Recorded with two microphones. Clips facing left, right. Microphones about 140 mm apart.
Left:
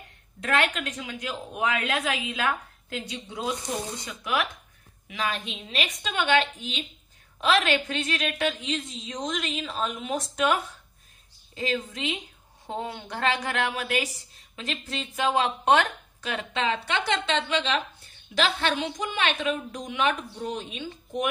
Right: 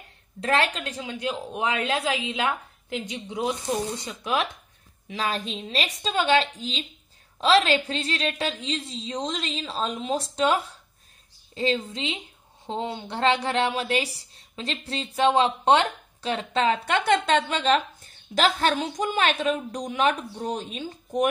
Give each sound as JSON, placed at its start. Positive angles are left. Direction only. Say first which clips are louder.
{"t": 0.4, "sound": "a woman's voice", "louder": "right 2 dB", "side_deg": -30}